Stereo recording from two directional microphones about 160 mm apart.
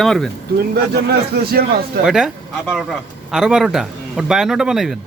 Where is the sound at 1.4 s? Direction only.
70° right (ahead or behind).